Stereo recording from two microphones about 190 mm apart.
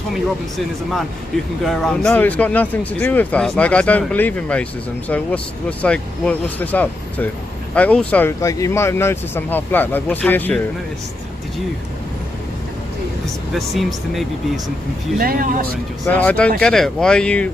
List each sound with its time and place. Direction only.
1.6 s speech: centre (ahead or behind)
13.5 s speech: centre (ahead or behind)
15.2 s speech: 50° right (ahead or behind)
16.0 s speech: 5° left (ahead or behind)